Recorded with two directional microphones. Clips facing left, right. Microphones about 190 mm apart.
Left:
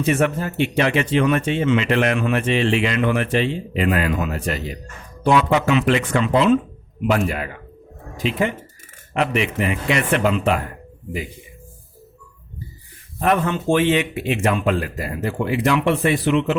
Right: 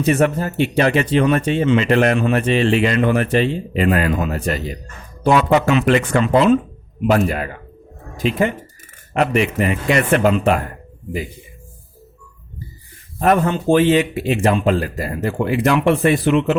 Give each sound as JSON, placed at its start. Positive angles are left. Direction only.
{"t": 0.0, "sound": "speech", "side_deg": -35}
{"t": 13.1, "sound": "speech", "side_deg": -40}